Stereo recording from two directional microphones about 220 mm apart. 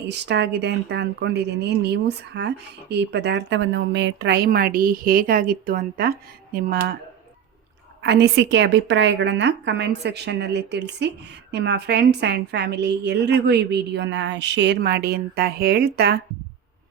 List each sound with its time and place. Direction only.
0.1 s a woman's voice: 50° right (ahead or behind)
8.0 s a woman's voice: 50° right (ahead or behind)